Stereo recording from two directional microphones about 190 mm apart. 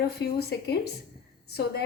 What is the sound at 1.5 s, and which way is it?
Speech, 55° left (ahead or behind).